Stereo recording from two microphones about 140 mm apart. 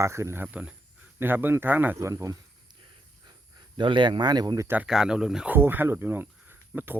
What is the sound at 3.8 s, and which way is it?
Speech, 35° right (ahead or behind).